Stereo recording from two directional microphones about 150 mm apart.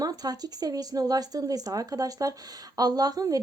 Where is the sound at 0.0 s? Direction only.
25° right (ahead or behind).